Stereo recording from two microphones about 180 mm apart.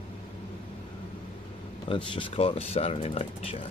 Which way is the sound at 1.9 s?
30° left (ahead or behind).